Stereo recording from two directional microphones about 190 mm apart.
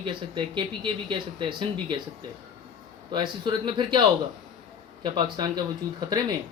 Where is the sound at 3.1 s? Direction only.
25° right (ahead or behind).